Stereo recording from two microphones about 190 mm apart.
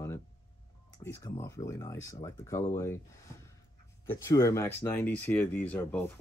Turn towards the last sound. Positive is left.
turn(degrees=10)  # may be behind; listen again after turning